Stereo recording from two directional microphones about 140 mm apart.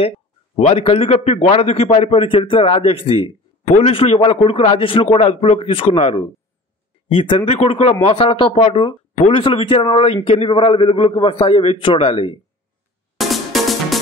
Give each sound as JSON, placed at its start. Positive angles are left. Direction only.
{"t": 0.6, "sound": "a man's voice", "side_deg": 45}
{"t": 13.2, "sound": "music", "side_deg": 0}